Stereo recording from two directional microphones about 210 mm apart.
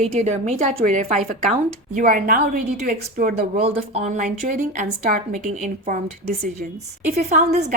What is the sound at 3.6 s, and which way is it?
A woman's voice, 30° right (ahead or behind).